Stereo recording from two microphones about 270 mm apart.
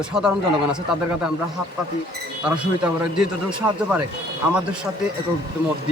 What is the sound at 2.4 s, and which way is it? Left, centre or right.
Speech, centre.